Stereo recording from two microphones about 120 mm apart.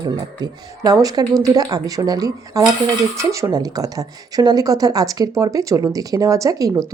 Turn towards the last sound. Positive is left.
turn(degrees=-30)  # may be behind; listen again after turning